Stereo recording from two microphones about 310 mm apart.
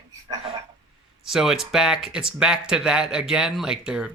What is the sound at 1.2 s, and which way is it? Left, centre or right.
Speech, centre.